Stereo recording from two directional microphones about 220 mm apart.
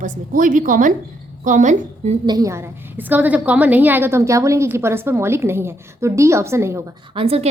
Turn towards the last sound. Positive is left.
turn(degrees=-25)  # may be behind; listen again after turning